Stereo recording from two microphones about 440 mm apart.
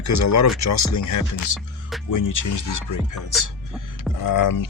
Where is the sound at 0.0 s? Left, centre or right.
Left.